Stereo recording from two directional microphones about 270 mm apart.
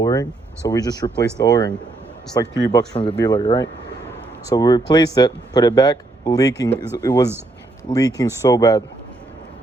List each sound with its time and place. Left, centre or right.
0.0 s speech: centre